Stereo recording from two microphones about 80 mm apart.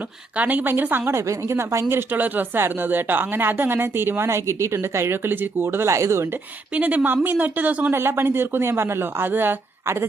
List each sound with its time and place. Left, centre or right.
0.3 s speech: right
6.7 s speech: centre